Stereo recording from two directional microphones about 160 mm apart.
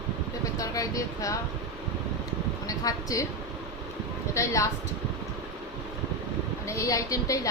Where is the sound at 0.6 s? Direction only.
20° left (ahead or behind).